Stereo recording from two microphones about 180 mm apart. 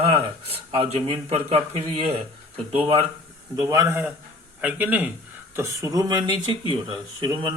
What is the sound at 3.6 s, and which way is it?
A man's voice, 20° right (ahead or behind).